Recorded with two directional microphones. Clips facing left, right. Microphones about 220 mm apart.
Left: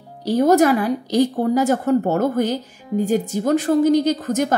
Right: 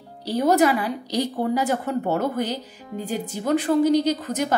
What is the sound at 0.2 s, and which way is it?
A woman's voice, 45° left (ahead or behind).